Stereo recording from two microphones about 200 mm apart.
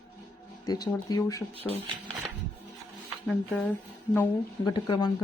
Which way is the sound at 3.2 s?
5° left (ahead or behind).